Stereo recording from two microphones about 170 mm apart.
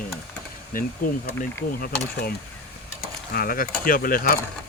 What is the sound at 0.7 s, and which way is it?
Speech, 55° left (ahead or behind).